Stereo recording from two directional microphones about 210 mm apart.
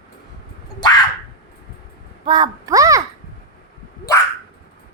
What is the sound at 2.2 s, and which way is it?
Speech, 20° right (ahead or behind).